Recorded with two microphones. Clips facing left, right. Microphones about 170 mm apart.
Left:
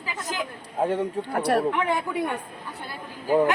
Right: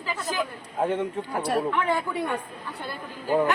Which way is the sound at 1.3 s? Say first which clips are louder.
Left 3 dB; 70° left (ahead or behind).